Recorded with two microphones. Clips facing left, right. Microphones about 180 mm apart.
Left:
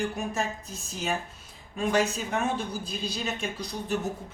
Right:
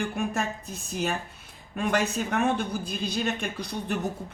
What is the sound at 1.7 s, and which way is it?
Speech, 60° right (ahead or behind).